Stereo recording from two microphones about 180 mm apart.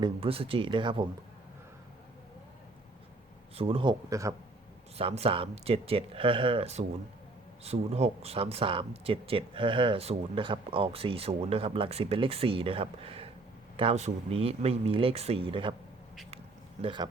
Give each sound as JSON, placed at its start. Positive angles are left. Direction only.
{"t": 0.0, "sound": "speech", "side_deg": -30}
{"t": 3.6, "sound": "speech", "side_deg": -30}
{"t": 4.9, "sound": "speech", "side_deg": -35}
{"t": 16.8, "sound": "speech", "side_deg": -25}